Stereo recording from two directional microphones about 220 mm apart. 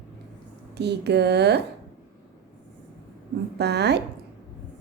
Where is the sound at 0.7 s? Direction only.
50° right (ahead or behind).